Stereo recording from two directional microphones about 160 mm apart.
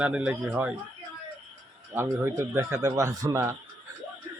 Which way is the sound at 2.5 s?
15° right (ahead or behind).